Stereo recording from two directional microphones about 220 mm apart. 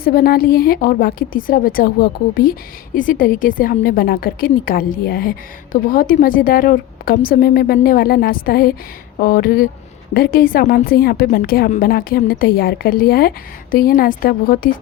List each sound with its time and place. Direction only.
0.0 s a woman's voice: 40° left (ahead or behind)